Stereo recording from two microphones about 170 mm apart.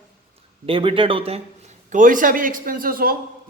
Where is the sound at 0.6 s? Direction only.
30° right (ahead or behind).